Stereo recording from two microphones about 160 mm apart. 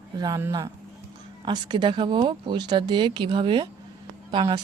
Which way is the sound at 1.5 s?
30° right (ahead or behind).